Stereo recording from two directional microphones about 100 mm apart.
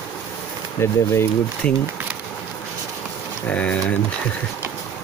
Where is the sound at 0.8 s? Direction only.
25° left (ahead or behind).